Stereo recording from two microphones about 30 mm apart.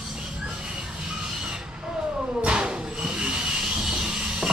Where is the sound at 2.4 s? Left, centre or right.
Right.